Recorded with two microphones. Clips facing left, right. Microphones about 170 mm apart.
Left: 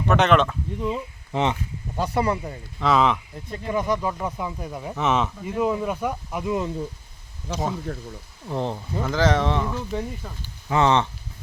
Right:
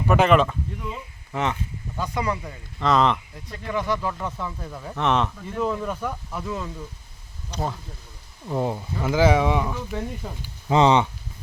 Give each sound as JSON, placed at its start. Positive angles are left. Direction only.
{"t": 0.1, "sound": "speech", "side_deg": -5}
{"t": 0.9, "sound": "speech", "side_deg": 20}
{"t": 2.1, "sound": "speech", "side_deg": 30}
{"t": 2.7, "sound": "speech", "side_deg": 5}
{"t": 3.5, "sound": "speech", "side_deg": 25}
{"t": 4.9, "sound": "speech", "side_deg": 0}
{"t": 7.5, "sound": "speech", "side_deg": 90}
{"t": 8.4, "sound": "speech", "side_deg": -10}